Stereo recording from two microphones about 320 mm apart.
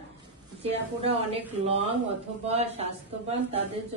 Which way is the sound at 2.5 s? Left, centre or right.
Centre.